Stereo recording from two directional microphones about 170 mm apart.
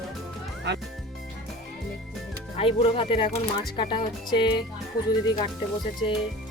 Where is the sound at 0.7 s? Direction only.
85° right.